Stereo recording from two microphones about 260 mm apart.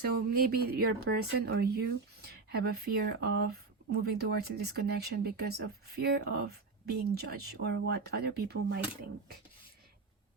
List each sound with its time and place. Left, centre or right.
0.0 s speech: right